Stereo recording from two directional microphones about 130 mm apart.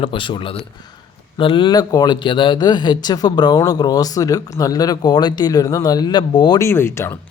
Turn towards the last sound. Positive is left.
turn(degrees=20)  # may be behind; listen again after turning